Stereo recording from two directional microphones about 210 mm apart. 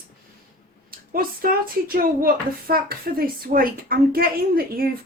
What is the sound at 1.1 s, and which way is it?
Speech, 40° right (ahead or behind).